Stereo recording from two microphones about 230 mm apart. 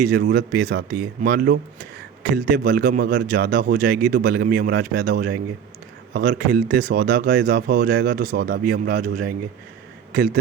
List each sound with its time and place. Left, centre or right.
0.0 s speech: right